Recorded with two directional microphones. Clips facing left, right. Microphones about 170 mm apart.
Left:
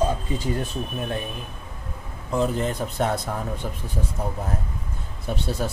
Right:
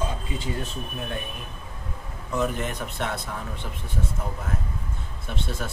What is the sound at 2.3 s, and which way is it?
Speech, 30° left (ahead or behind).